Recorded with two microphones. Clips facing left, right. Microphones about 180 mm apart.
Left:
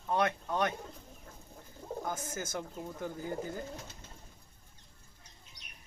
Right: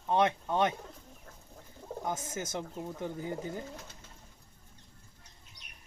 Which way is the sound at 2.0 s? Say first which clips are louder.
Right 5 dB; 20° right (ahead or behind).